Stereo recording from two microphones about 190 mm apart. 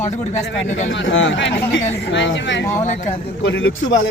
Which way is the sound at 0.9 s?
80° left.